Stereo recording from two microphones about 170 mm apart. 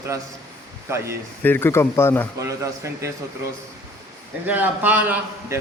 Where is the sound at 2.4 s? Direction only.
15° right (ahead or behind).